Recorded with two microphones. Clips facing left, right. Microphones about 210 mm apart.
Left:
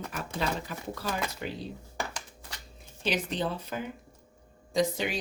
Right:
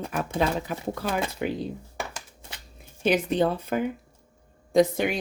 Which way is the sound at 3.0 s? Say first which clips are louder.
Right 8 dB; 55° right (ahead or behind).